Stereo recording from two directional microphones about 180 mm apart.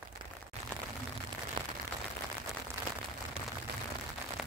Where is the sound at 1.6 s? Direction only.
25° right (ahead or behind).